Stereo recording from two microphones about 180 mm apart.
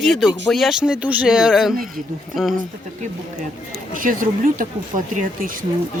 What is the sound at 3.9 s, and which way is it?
Speech, 50° right (ahead or behind).